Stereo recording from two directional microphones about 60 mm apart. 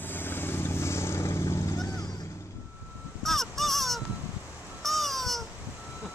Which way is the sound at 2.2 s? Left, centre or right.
Left.